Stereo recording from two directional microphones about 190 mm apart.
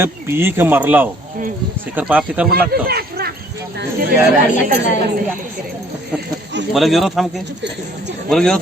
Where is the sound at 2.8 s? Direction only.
55° right (ahead or behind).